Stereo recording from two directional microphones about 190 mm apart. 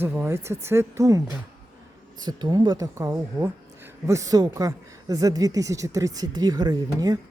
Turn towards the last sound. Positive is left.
turn(degrees=-20)  # may be behind; listen again after turning